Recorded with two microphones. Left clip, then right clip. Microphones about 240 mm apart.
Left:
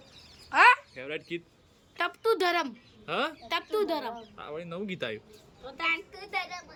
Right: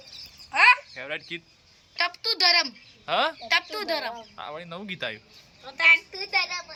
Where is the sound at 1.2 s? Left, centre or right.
Left.